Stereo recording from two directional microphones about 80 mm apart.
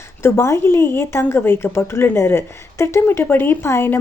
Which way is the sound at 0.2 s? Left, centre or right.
Left.